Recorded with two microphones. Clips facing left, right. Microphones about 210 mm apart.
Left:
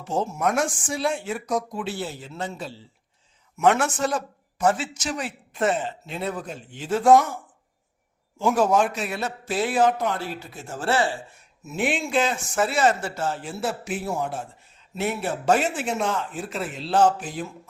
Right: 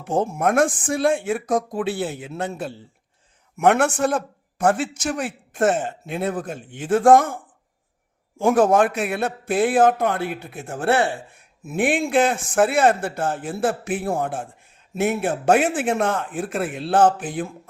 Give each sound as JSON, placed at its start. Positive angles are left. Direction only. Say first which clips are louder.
{"t": 0.0, "sound": "a man's voice", "louder": "right 4 dB", "side_deg": -55}